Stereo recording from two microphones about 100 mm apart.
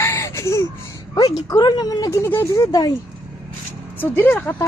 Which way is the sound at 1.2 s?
35° left (ahead or behind).